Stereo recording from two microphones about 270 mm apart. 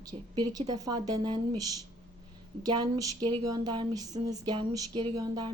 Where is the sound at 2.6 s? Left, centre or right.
Centre.